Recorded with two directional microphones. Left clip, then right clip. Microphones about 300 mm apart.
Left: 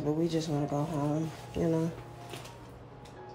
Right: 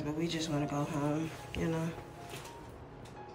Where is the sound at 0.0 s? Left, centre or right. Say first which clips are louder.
Left 5 dB; centre.